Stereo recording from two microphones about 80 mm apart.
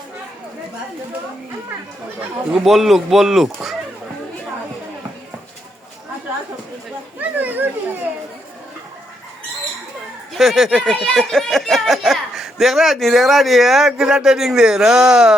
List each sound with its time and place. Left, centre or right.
2.5 s speech: centre
7.2 s chatter: right
10.3 s speech: centre